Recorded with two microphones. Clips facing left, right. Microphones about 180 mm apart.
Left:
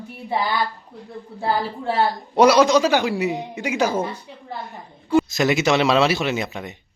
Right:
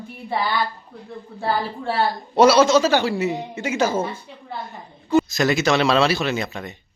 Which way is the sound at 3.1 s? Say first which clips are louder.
Even; centre (ahead or behind).